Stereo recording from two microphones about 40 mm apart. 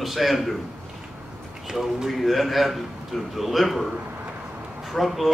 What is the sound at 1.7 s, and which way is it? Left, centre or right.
Speech, centre.